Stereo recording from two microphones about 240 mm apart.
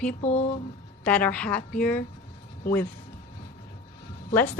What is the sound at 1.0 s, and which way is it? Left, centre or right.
A woman's voice, centre.